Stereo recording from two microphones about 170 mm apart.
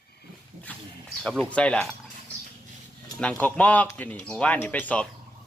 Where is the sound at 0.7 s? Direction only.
10° left (ahead or behind).